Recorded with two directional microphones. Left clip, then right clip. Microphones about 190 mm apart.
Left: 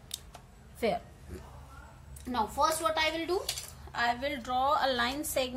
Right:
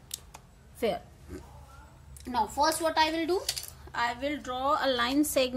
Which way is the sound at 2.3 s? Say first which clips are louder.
Right 2 dB; 45° right (ahead or behind).